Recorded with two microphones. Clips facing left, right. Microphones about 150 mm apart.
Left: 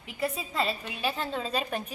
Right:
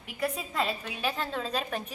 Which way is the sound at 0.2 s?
Centre (ahead or behind).